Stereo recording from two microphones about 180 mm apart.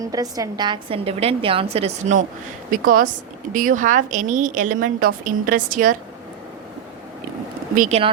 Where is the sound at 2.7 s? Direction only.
50° right (ahead or behind).